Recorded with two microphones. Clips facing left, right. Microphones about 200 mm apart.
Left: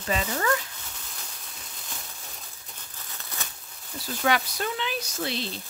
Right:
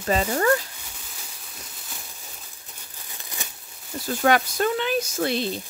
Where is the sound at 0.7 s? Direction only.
10° right (ahead or behind).